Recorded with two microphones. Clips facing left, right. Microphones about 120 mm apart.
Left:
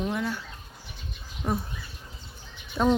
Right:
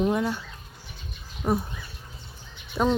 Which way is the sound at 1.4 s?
15° right (ahead or behind).